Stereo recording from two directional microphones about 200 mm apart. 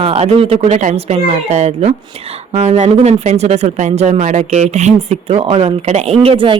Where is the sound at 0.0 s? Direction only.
30° right (ahead or behind).